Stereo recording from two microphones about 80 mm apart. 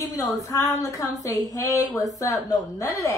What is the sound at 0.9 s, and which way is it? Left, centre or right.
A woman's voice, left.